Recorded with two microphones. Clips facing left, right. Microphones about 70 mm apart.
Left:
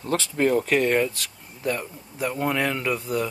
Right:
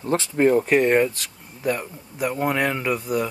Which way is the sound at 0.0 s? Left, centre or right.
Right.